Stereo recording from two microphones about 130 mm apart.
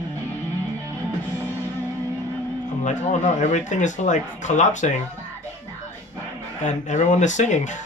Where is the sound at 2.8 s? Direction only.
65° left (ahead or behind).